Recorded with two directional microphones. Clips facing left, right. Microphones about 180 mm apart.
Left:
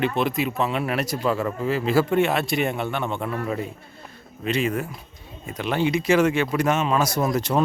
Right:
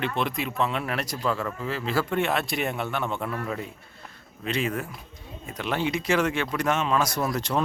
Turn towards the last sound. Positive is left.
turn(degrees=10)  # may be behind; listen again after turning